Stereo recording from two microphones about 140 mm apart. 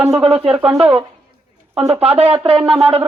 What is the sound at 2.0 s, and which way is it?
Speech, 45° right (ahead or behind).